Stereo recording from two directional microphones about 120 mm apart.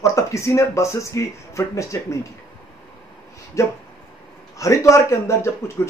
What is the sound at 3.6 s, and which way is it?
Speech, 25° left (ahead or behind).